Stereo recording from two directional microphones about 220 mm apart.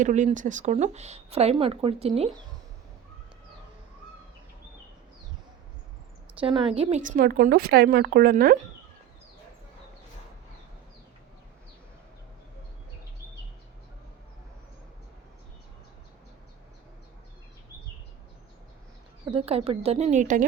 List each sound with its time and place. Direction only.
0.0 s speech: 35° right (ahead or behind)
6.4 s speech: 25° right (ahead or behind); by 8.5 s 40° right (ahead or behind)
19.2 s speech: 25° right (ahead or behind)